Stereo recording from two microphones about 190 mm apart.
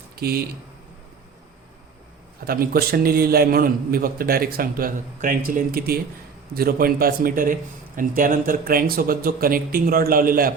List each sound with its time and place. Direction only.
0.2 s speech: 55° right (ahead or behind)
2.4 s a man's voice: 50° right (ahead or behind)